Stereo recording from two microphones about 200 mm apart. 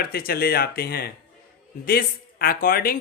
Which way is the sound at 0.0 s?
50° left (ahead or behind).